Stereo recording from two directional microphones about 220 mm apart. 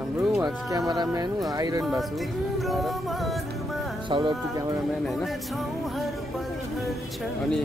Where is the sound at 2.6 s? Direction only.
Centre (ahead or behind).